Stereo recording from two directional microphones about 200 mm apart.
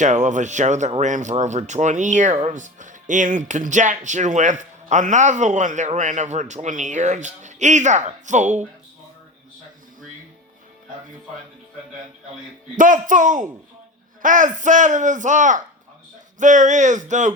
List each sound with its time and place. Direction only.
0.0 s speech: 40° right (ahead or behind)
12.7 s speech: 40° right (ahead or behind)